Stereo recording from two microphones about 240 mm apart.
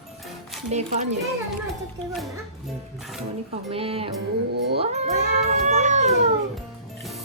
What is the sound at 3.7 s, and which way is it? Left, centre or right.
Cat, right.